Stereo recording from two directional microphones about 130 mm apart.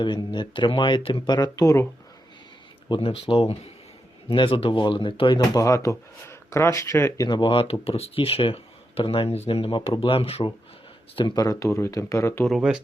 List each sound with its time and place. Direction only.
0.0 s speech: 35° left (ahead or behind)
2.9 s speech: 45° left (ahead or behind)
5.4 s speech: 25° left (ahead or behind)
7.3 s speech: 40° left (ahead or behind)
11.3 s speech: 25° left (ahead or behind)
12.5 s speech: 5° right (ahead or behind)